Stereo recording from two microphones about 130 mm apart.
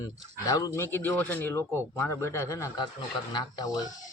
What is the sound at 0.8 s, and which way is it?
Speech, 15° left (ahead or behind).